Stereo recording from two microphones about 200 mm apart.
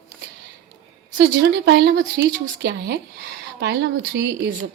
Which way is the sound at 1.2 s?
55° right (ahead or behind).